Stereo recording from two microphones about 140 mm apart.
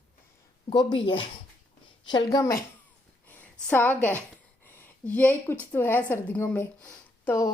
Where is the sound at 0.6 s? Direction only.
35° left (ahead or behind).